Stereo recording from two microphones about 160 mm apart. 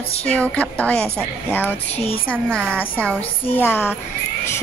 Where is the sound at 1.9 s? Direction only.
40° left (ahead or behind).